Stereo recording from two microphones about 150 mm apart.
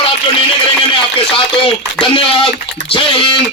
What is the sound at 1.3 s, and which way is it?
A man's voice, 35° left (ahead or behind).